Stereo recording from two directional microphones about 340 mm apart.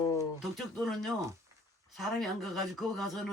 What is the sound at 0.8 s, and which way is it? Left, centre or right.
Speech, centre.